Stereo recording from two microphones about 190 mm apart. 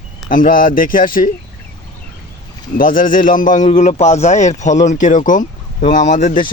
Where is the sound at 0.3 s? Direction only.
45° left (ahead or behind).